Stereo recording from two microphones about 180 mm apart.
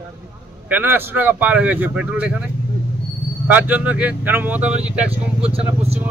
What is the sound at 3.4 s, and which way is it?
A man's voice, 10° right (ahead or behind).